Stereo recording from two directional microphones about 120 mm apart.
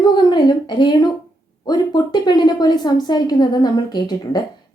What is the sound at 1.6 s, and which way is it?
A woman's voice, 35° left (ahead or behind).